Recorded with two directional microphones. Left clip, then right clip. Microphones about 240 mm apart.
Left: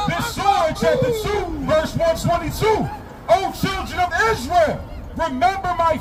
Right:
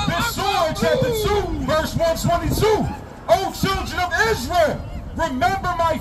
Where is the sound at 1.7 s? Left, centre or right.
Centre.